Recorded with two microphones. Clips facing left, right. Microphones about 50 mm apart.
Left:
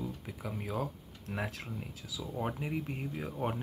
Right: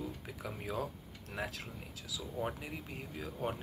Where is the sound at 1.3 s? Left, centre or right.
Left.